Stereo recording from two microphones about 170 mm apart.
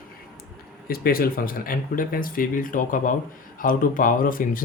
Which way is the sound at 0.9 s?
60° left (ahead or behind).